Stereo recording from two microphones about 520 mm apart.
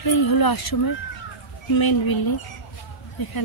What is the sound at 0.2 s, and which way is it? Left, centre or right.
Speech, left.